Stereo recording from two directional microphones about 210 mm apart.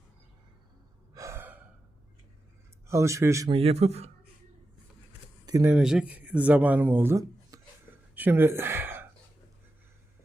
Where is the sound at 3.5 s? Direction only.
30° right (ahead or behind).